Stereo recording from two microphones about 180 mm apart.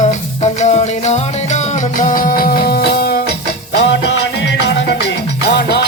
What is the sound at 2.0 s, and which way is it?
Music, 50° left (ahead or behind).